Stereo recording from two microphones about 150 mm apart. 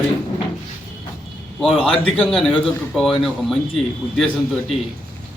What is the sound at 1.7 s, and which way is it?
Speech, 35° left (ahead or behind).